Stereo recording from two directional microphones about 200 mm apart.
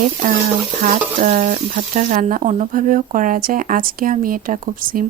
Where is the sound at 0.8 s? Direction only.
40° right (ahead or behind).